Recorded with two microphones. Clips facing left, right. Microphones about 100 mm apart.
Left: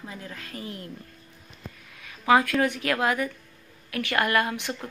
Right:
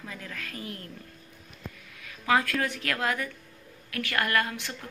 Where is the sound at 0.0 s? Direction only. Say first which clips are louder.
Left 1 dB; 25° left (ahead or behind).